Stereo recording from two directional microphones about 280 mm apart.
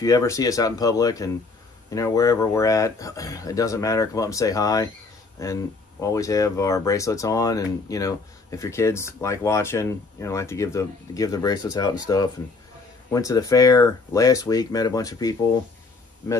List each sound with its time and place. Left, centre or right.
0.0 s speech: centre